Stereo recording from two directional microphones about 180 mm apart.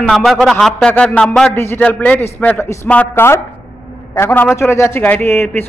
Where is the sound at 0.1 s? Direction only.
Centre (ahead or behind).